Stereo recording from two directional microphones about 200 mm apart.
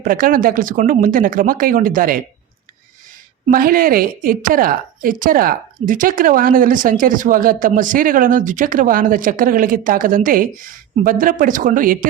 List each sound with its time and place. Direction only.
0.0 s a woman's voice: 45° right (ahead or behind)
3.5 s a woman's voice: 45° right (ahead or behind)